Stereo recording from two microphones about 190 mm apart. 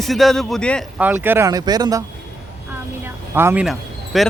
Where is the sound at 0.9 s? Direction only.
10° right (ahead or behind).